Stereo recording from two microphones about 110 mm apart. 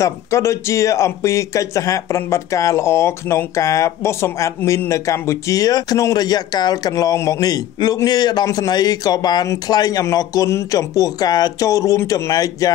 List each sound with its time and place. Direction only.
0.0 s speech: 25° left (ahead or behind)